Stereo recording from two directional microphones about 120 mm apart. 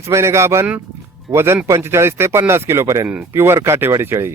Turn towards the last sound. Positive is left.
turn(degrees=-20)  # may be behind; listen again after turning